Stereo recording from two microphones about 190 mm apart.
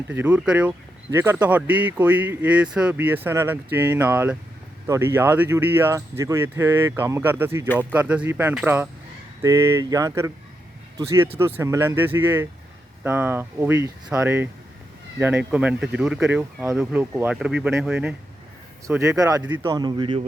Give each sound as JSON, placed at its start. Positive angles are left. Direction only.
{"t": 0.1, "sound": "a man's voice", "side_deg": -10}